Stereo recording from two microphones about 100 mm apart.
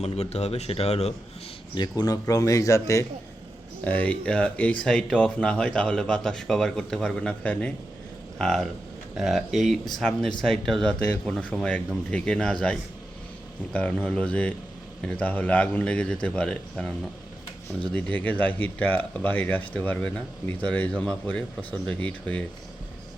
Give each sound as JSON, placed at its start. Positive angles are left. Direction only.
{"t": 0.0, "sound": "speech", "side_deg": 90}
{"t": 1.7, "sound": "speech", "side_deg": 45}
{"t": 3.8, "sound": "speech", "side_deg": 15}
{"t": 17.9, "sound": "speech", "side_deg": 15}